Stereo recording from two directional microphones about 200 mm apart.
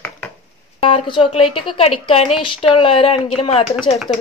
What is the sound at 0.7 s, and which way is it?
Speech, 25° left (ahead or behind).